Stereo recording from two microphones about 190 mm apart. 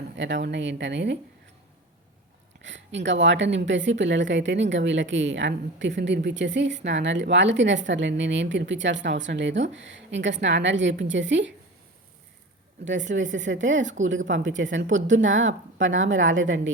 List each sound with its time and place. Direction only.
0.2 s speech: 70° right (ahead or behind)
2.6 s speech: 70° right (ahead or behind)
13.3 s a woman's voice: 75° right (ahead or behind)